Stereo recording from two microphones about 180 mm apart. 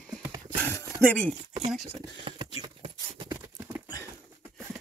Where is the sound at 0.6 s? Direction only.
15° left (ahead or behind).